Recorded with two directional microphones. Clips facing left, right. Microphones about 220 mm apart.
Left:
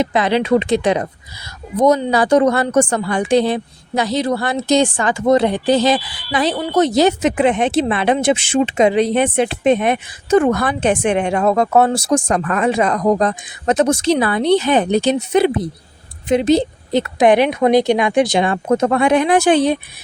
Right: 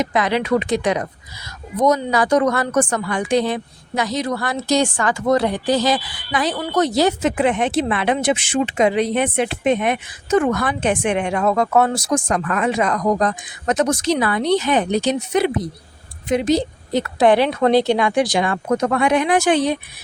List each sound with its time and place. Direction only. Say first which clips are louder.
0.0 s a woman's voice: left 3 dB; 30° left (ahead or behind)